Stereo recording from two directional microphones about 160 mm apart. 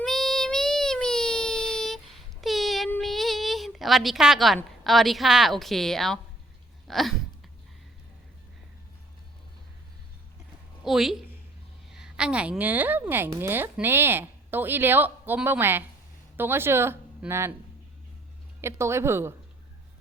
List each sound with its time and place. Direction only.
0.0 s child singing: centre (ahead or behind)
3.0 s a woman's voice: centre (ahead or behind)
6.8 s a sound: centre (ahead or behind)
10.8 s a woman's voice: centre (ahead or behind)
18.6 s a woman's voice: 15° right (ahead or behind)